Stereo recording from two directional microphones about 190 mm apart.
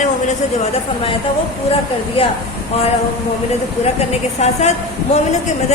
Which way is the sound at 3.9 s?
35° left (ahead or behind).